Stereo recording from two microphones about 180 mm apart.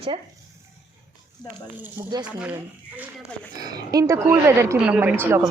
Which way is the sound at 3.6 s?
20° right (ahead or behind).